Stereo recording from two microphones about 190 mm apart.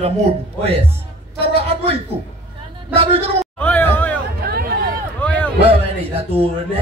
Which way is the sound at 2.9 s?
30° right (ahead or behind).